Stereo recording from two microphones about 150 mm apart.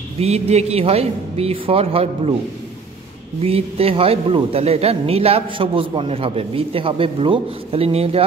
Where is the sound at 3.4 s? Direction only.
40° right (ahead or behind).